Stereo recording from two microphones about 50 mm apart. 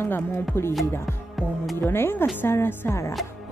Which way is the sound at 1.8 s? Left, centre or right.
Left.